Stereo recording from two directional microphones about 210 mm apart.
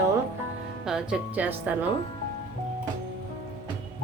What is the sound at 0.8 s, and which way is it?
Speech, centre (ahead or behind).